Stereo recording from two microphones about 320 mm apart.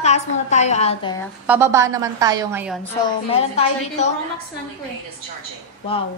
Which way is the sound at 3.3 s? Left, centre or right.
Centre.